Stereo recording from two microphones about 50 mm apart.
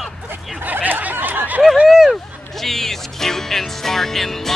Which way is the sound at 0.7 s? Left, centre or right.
Right.